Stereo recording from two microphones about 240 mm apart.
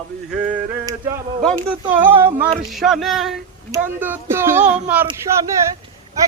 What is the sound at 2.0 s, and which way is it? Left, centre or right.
Speech, centre.